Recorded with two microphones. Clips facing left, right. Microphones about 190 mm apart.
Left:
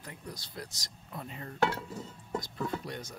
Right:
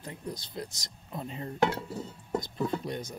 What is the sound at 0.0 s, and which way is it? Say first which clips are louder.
Speech: right 6 dB; 25° right (ahead or behind).